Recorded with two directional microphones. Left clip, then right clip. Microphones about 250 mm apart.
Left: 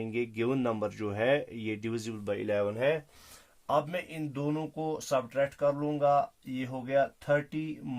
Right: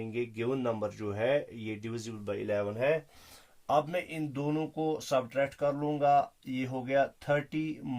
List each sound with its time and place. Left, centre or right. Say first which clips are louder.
0.0 s speech: left 2 dB; left
3.7 s speech: right 1 dB; centre